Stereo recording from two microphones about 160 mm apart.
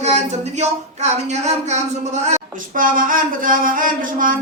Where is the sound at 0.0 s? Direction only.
45° right (ahead or behind).